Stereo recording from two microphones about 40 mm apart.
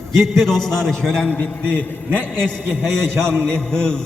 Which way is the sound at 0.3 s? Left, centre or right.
Centre.